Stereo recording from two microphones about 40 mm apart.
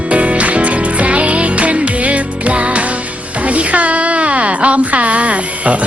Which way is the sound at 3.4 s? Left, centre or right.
Right.